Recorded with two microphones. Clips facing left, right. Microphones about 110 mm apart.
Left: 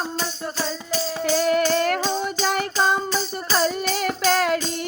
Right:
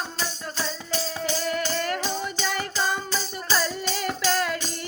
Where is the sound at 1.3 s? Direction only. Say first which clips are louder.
Left 10 dB; 60° left (ahead or behind).